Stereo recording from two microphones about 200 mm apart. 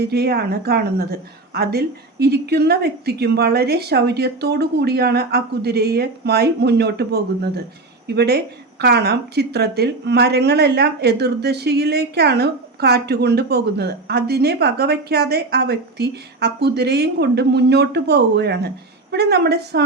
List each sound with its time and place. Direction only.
0.0 s a woman's voice: 55° right (ahead or behind)